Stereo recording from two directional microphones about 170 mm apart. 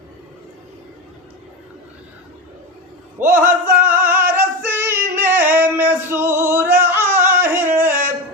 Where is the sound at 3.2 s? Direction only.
15° right (ahead or behind).